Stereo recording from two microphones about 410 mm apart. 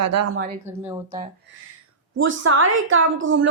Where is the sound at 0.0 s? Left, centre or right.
Right.